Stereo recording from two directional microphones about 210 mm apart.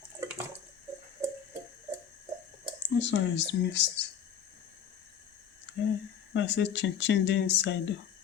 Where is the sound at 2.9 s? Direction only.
55° left (ahead or behind).